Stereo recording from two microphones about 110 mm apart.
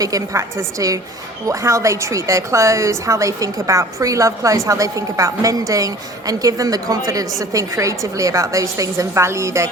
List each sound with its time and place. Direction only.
0.0 s a woman's voice: 30° right (ahead or behind)